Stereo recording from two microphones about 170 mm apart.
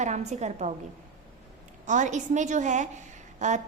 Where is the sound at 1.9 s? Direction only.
45° right (ahead or behind).